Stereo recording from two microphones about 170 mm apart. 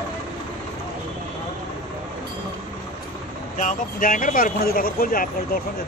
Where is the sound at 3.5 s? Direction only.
50° left (ahead or behind).